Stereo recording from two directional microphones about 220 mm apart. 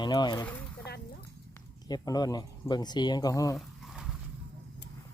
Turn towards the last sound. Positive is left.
turn(degrees=15)  # may be behind; listen again after turning